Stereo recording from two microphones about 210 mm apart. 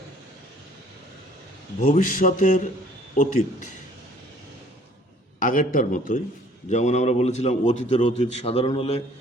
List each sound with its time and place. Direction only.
1.8 s a man's voice: 35° left (ahead or behind)
5.4 s a man's voice: 40° left (ahead or behind); by 9.0 s 25° left (ahead or behind)